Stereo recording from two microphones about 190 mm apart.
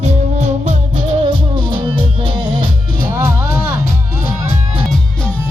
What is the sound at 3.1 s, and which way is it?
Music, 10° right (ahead or behind).